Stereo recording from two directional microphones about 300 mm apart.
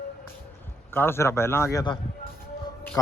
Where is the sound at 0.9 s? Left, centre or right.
Centre.